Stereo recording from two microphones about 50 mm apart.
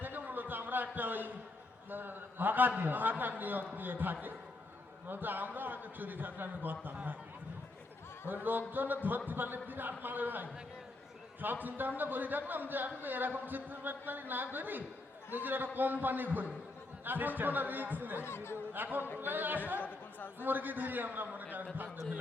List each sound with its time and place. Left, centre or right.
0.0 s a sound: right
1.9 s speech: right
8.3 s speech: right
18.2 s speech: left
18.7 s speech: right
19.8 s speech: left
20.4 s speech: right